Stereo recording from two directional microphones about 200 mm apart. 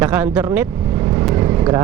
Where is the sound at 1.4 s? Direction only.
15° right (ahead or behind).